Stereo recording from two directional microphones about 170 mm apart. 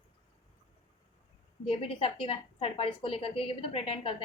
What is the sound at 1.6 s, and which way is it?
A woman's voice, 35° left (ahead or behind).